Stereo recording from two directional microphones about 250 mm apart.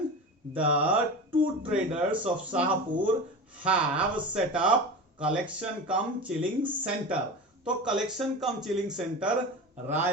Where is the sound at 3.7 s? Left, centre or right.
Centre.